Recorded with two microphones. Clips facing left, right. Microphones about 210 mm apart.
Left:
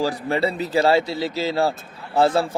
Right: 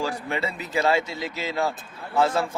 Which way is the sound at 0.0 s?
35° left (ahead or behind).